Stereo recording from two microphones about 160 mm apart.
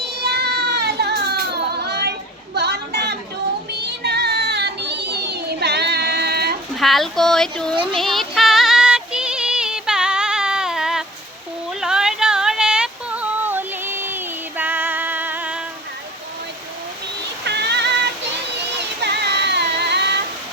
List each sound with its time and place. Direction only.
0.0 s baby cry: 90° right
2.6 s a sound: 90° right
3.7 s child singing: 90° right
6.7 s speech: centre (ahead or behind)
7.9 s synthetic singing: centre (ahead or behind)
11.8 s a sound: 5° right (ahead or behind)
17.4 s synthetic singing: 90° right
18.8 s child singing: 90° right